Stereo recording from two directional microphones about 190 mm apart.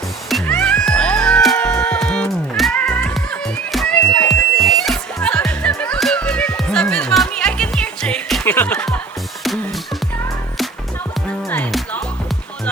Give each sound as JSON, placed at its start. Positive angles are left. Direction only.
{"t": 0.3, "sound": "music", "side_deg": 0}